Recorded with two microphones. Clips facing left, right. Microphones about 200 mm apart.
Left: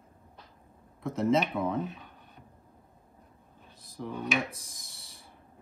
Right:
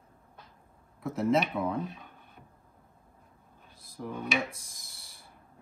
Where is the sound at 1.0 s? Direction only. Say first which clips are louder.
Left 1 dB; centre (ahead or behind).